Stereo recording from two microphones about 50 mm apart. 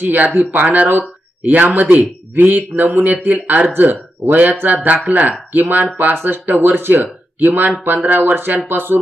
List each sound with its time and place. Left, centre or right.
0.0 s speech: right